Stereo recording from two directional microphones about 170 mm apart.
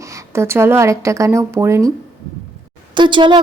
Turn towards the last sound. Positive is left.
turn(degrees=-30)  # may be behind; listen again after turning